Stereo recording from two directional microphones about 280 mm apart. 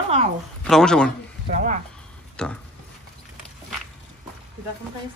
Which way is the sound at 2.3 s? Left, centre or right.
Centre.